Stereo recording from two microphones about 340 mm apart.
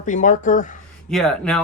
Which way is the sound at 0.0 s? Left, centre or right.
Left.